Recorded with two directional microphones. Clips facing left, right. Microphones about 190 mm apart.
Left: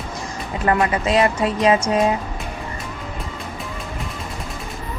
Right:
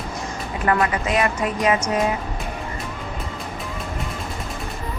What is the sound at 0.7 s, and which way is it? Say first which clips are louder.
A woman's voice: left 2 dB; 25° left (ahead or behind).